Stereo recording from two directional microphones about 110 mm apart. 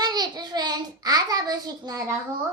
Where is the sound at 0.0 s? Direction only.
40° right (ahead or behind).